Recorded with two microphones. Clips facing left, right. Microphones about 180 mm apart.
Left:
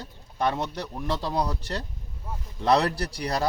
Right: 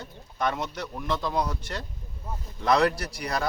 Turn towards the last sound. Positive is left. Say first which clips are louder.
# left 2 dB
turn(degrees=35)  # may be behind; listen again after turning